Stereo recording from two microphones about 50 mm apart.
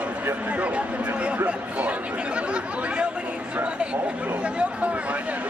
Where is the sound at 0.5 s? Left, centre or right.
Right.